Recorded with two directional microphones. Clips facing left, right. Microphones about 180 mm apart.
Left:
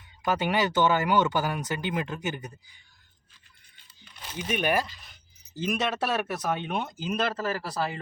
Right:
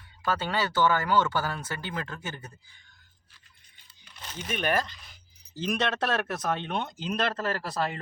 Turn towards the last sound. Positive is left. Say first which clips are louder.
# even
turn(degrees=0)  # may be behind; listen again after turning